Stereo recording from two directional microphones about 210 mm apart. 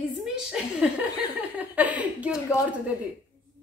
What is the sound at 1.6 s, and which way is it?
Speech, 5° right (ahead or behind).